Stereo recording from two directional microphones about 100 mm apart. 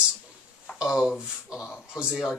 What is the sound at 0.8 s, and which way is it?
Speech, 5° right (ahead or behind).